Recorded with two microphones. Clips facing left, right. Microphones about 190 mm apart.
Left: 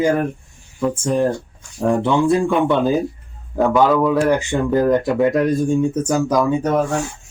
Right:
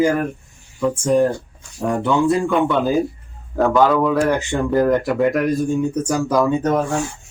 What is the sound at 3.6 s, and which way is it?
Speech, 10° left (ahead or behind).